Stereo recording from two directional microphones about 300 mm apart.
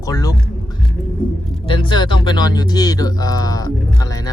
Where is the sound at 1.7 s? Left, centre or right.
Centre.